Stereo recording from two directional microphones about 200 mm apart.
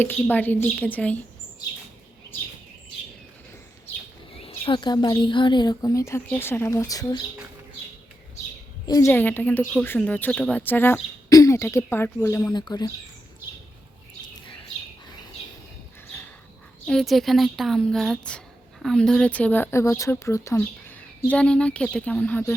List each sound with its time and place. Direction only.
0.0 s speech: 10° left (ahead or behind)
4.4 s speech: 30° left (ahead or behind)
8.9 s speech: 15° left (ahead or behind)
16.8 s a woman's voice: centre (ahead or behind)